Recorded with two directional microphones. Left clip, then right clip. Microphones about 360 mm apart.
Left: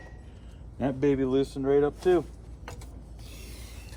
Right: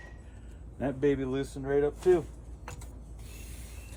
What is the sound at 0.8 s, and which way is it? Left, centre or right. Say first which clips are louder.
Speech: left 3 dB; left.